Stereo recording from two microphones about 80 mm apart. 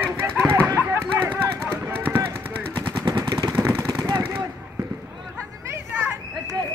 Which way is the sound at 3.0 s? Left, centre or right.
Right.